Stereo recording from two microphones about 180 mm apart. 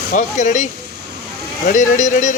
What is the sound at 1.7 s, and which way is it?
Speech, 45° left (ahead or behind).